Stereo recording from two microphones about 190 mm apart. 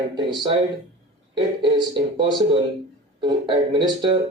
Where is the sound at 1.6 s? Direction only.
20° right (ahead or behind).